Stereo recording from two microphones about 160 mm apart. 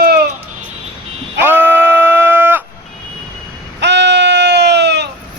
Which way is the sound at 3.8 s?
90° right.